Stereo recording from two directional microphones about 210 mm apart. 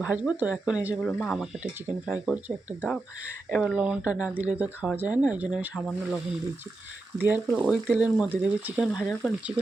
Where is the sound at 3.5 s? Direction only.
Centre (ahead or behind).